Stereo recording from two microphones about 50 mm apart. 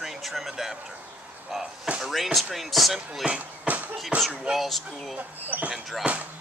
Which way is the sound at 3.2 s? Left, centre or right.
Right.